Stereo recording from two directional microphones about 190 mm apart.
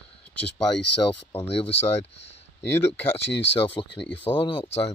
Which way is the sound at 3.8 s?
25° left (ahead or behind).